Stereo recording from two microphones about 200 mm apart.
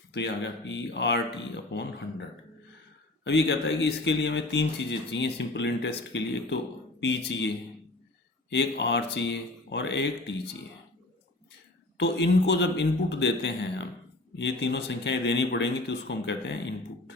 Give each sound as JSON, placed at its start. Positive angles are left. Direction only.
{"t": 0.1, "sound": "speech", "side_deg": 60}
{"t": 3.2, "sound": "speech", "side_deg": 60}
{"t": 11.9, "sound": "speech", "side_deg": 60}